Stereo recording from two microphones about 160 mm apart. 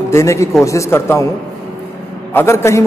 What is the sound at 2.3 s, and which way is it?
Speech, 15° left (ahead or behind).